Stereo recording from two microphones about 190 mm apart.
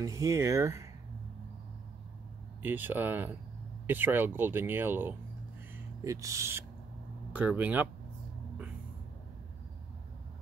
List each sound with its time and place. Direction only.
0.0 s speech: 15° right (ahead or behind)
2.6 s speech: 10° right (ahead or behind)